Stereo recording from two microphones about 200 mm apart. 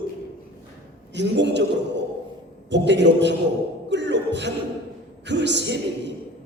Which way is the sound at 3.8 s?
60° right (ahead or behind).